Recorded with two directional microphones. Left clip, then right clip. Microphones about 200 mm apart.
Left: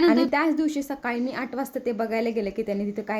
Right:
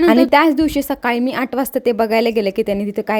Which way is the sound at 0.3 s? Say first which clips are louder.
Right 10 dB; 45° right (ahead or behind).